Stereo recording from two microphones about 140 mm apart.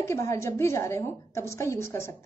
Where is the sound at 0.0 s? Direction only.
20° left (ahead or behind).